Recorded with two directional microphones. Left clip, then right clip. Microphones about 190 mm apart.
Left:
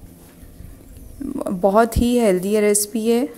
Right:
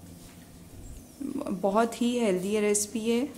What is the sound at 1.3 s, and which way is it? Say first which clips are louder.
A woman's voice: left 10 dB; 30° left (ahead or behind).